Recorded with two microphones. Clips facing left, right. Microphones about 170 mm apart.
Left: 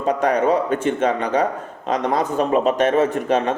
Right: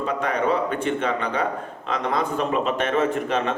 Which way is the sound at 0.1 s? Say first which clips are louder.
Left 7 dB; 40° left (ahead or behind).